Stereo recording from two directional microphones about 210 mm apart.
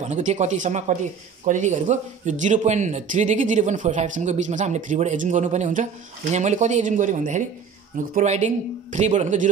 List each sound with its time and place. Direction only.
0.0 s speech: 35° right (ahead or behind)